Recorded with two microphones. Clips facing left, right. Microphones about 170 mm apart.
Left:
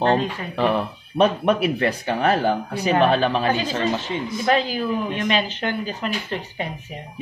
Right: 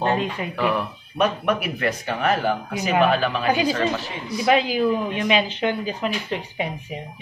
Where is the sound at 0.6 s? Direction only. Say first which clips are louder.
Left 3 dB; 25° left (ahead or behind).